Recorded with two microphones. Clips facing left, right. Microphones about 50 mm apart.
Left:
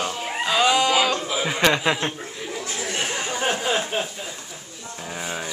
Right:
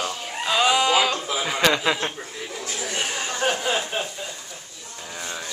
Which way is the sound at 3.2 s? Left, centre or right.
Centre.